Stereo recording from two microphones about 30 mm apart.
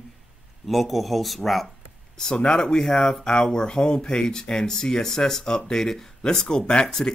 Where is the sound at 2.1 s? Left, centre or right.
Left.